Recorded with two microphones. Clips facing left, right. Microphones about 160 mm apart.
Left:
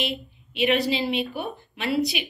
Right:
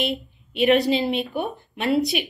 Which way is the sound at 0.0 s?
50° right (ahead or behind).